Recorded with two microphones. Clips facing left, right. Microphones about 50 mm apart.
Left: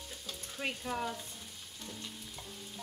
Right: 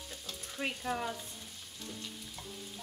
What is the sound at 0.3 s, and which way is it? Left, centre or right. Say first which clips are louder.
Sizzle: right 1 dB; centre.